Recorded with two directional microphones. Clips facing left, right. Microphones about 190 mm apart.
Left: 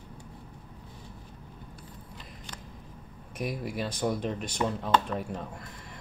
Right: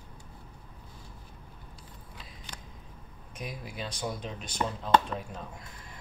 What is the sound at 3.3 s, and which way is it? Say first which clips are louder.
Speech: left 7 dB; 60° left (ahead or behind).